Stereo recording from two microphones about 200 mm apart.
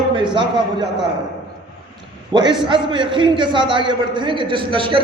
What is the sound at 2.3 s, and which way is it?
A man's voice, 25° right (ahead or behind).